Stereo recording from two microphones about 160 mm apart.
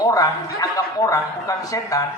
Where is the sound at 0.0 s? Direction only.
20° left (ahead or behind).